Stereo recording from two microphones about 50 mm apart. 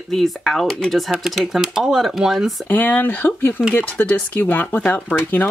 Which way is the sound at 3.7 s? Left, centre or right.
Left.